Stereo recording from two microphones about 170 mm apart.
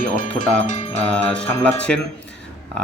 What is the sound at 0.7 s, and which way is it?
Music, 40° left (ahead or behind).